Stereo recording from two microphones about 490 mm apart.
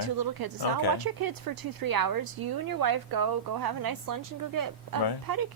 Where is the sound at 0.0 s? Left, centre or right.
Right.